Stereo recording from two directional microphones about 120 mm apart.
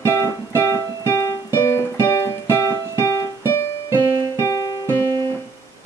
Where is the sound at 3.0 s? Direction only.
25° left (ahead or behind).